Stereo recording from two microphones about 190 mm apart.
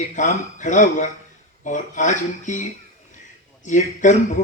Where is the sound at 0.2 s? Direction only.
40° left (ahead or behind).